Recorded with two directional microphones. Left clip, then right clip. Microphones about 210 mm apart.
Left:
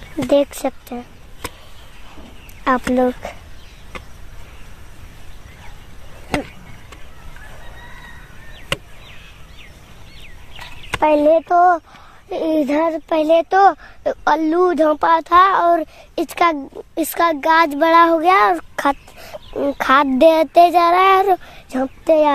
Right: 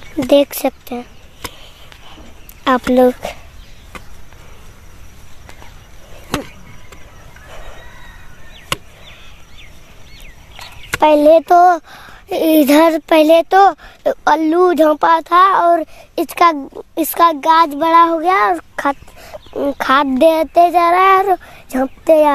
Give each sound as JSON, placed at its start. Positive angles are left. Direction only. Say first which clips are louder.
{"t": 0.3, "sound": "speech", "louder": "right 4 dB", "side_deg": -20}
{"t": 2.6, "sound": "speech", "louder": "right 5 dB", "side_deg": -15}
{"t": 8.7, "sound": "chop", "louder": "right 2 dB", "side_deg": -35}
{"t": 11.0, "sound": "speech", "louder": "right 4 dB", "side_deg": -20}
{"t": 11.4, "sound": "speech", "louder": "right 4 dB", "side_deg": -45}
{"t": 12.1, "sound": "speech", "louder": "right 6 dB", "side_deg": -30}
{"t": 13.5, "sound": "speech", "louder": "right 3 dB", "side_deg": -20}
{"t": 17.5, "sound": "speech", "louder": "right 2 dB", "side_deg": 0}
{"t": 20.8, "sound": "speech", "louder": "right 2 dB", "side_deg": -10}
{"t": 21.6, "sound": "a child's voice", "louder": "right 4 dB", "side_deg": -20}